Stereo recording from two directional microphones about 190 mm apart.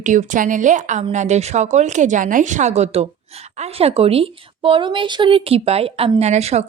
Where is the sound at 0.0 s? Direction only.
40° right (ahead or behind).